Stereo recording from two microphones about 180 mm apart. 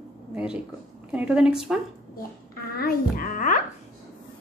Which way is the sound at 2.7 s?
55° left (ahead or behind).